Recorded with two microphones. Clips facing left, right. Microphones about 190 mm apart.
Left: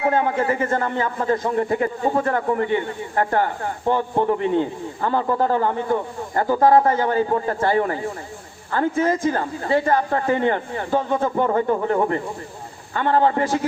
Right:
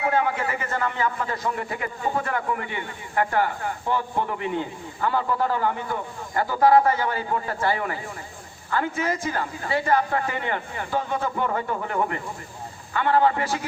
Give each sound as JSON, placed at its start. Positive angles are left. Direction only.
{"t": 0.0, "sound": "a man's voice", "side_deg": 40}
{"t": 3.8, "sound": "speech", "side_deg": 20}
{"t": 4.9, "sound": "speech", "side_deg": 45}
{"t": 11.4, "sound": "a man's voice", "side_deg": 35}
{"t": 13.1, "sound": "speech", "side_deg": 45}